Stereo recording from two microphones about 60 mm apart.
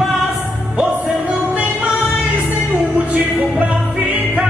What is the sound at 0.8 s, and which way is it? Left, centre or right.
Music, right.